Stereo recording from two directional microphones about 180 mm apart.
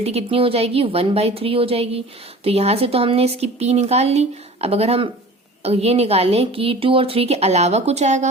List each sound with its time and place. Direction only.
0.0 s a woman's voice: 35° right (ahead or behind)